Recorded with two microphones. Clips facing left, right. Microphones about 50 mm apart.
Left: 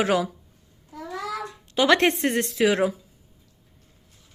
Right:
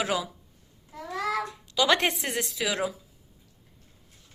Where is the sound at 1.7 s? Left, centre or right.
Left.